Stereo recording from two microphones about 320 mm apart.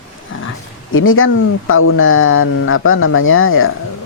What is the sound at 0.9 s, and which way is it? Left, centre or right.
Speech, left.